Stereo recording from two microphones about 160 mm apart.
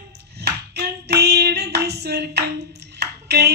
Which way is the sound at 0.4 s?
90° right.